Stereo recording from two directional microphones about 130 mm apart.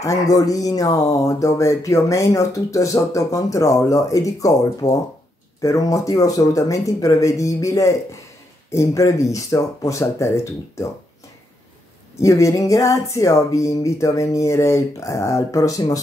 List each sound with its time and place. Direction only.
0.0 s speech: 25° left (ahead or behind)
12.2 s speech: 25° left (ahead or behind)